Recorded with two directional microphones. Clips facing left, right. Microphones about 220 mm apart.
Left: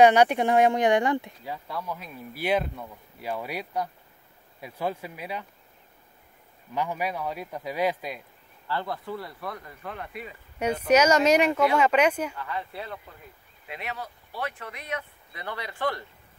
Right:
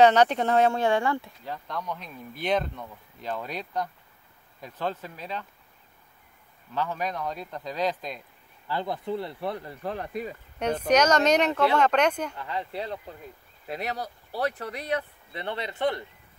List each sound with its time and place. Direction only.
0.0 s speech: 10° left (ahead or behind)
6.7 s speech: 15° left (ahead or behind)
8.6 s speech: 15° right (ahead or behind); by 10.3 s 35° right (ahead or behind)
10.6 s speech: 10° left (ahead or behind)
12.4 s speech: 20° right (ahead or behind)
13.7 s speech: 40° right (ahead or behind); by 16.1 s 20° right (ahead or behind)